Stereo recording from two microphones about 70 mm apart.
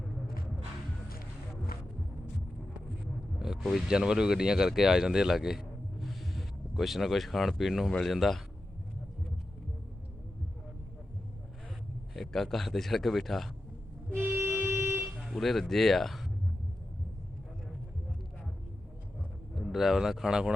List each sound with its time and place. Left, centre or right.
3.3 s a man's voice: centre
12.1 s a man's voice: centre
14.1 s vehicle: right
15.2 s speech: centre
19.5 s speech: centre